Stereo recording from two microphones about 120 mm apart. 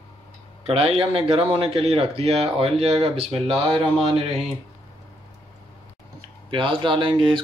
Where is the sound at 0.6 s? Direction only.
55° right (ahead or behind).